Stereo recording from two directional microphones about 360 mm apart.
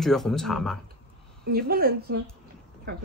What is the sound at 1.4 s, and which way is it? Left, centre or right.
A woman's voice, right.